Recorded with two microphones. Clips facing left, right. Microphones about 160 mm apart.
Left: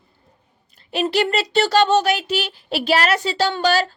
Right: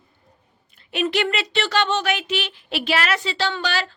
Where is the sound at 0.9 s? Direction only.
35° left (ahead or behind).